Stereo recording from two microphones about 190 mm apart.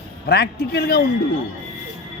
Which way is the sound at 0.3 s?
55° left (ahead or behind).